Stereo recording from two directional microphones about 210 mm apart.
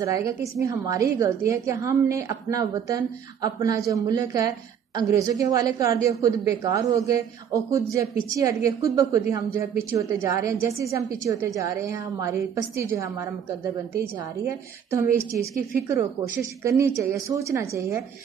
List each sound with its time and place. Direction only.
0.0 s a woman's voice: 15° right (ahead or behind)